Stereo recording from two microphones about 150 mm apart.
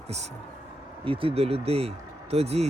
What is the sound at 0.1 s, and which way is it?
Speech, 45° right (ahead or behind).